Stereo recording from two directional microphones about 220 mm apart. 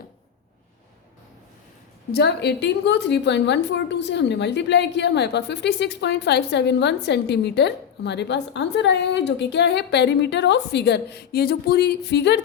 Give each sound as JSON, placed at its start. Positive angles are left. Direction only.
{"t": 2.1, "sound": "a woman's voice", "side_deg": 50}